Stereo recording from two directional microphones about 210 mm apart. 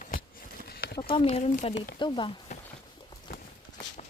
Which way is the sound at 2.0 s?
20° left (ahead or behind).